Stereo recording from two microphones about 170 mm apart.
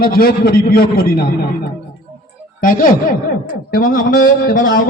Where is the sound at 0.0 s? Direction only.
60° left (ahead or behind).